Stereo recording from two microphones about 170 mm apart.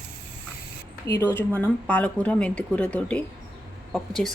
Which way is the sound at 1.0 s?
15° left (ahead or behind).